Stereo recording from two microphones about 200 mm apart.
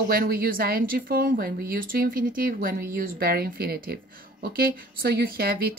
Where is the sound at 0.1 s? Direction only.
50° right (ahead or behind).